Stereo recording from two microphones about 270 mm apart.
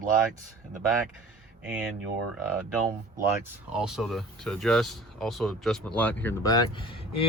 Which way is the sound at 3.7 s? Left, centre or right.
Centre.